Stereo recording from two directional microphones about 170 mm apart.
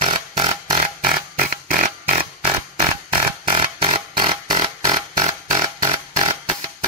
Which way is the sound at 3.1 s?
30° right (ahead or behind).